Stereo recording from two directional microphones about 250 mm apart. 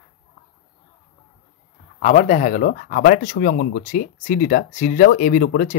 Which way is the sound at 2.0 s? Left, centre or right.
Left.